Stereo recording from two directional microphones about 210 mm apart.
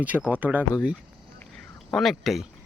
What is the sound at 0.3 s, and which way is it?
Speech, 5° right (ahead or behind).